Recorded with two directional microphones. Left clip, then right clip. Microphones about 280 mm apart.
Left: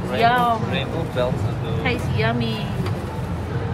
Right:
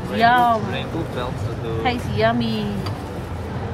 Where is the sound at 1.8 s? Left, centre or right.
Right.